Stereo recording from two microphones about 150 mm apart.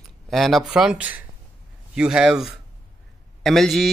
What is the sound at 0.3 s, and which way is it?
Speech, centre (ahead or behind).